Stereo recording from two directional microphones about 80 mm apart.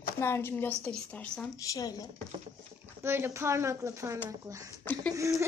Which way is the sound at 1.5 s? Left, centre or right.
Left.